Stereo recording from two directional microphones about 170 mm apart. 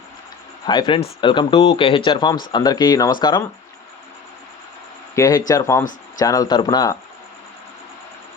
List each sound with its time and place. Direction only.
0.6 s speech: 25° left (ahead or behind)
5.1 s speech: 20° left (ahead or behind)